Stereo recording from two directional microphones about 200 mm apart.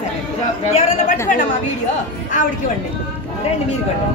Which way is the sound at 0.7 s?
35° left (ahead or behind).